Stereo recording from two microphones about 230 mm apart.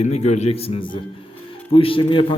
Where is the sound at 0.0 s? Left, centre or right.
Left.